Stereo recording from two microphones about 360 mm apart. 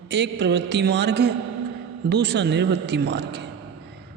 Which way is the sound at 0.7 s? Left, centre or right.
Right.